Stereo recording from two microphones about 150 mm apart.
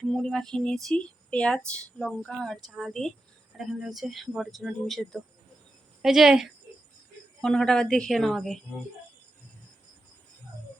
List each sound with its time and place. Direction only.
0.0 s speech: 5° left (ahead or behind)